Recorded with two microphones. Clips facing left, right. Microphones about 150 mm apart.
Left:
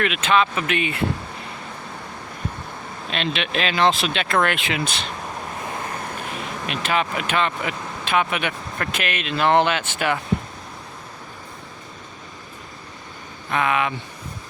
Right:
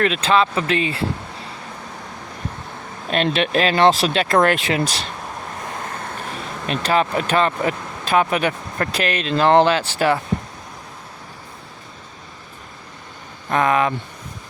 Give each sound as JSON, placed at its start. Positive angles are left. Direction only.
{"t": 0.0, "sound": "speech", "side_deg": -35}
{"t": 3.1, "sound": "speech", "side_deg": -45}
{"t": 6.7, "sound": "speech", "side_deg": -35}
{"t": 13.5, "sound": "speech", "side_deg": -40}